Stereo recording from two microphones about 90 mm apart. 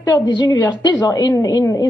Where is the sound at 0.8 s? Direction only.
45° left (ahead or behind).